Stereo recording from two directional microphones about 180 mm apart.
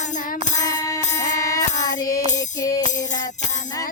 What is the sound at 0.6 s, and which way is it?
Music, 20° left (ahead or behind).